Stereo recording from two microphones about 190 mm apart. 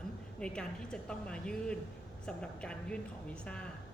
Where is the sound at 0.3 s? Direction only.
5° left (ahead or behind).